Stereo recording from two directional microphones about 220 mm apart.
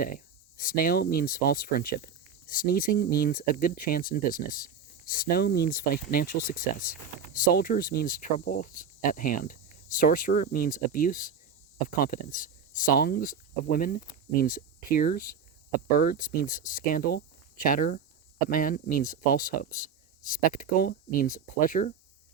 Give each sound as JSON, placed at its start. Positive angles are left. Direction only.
{"t": 0.0, "sound": "speech", "side_deg": 40}